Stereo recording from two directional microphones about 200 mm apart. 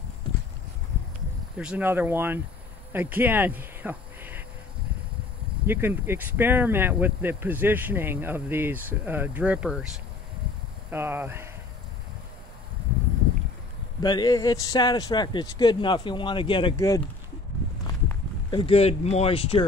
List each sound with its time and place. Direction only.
1.6 s speech: 5° right (ahead or behind)
2.9 s a sound: 10° right (ahead or behind)
5.7 s speech: 10° right (ahead or behind)
10.9 s speech: 10° right (ahead or behind)
14.0 s a man's voice: 20° left (ahead or behind)
18.0 s speech: 20° left (ahead or behind)